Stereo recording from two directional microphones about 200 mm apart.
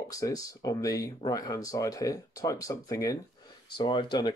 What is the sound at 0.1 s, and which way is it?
Speech, 15° left (ahead or behind).